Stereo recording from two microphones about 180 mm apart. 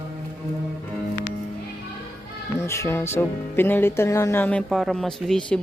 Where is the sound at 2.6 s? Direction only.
15° left (ahead or behind).